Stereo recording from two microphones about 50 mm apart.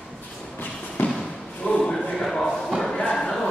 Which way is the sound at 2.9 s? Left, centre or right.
Centre.